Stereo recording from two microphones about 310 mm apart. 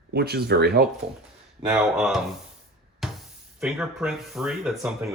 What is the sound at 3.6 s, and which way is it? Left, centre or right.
Speech, centre.